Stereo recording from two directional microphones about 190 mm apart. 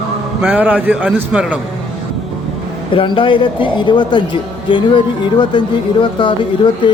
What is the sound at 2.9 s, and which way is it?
Speech, 25° left (ahead or behind).